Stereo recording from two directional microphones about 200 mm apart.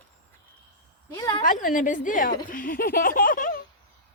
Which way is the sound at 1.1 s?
20° left (ahead or behind).